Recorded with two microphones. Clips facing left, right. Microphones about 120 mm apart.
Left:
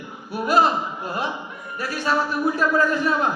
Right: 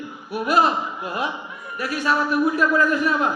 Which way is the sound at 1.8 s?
30° left (ahead or behind).